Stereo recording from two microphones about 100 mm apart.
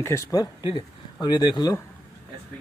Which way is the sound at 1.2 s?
45° left (ahead or behind).